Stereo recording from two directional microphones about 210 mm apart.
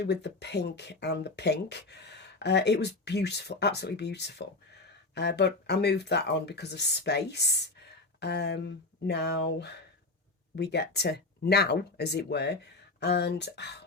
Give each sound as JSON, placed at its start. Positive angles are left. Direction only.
{"t": 0.0, "sound": "speech", "side_deg": 55}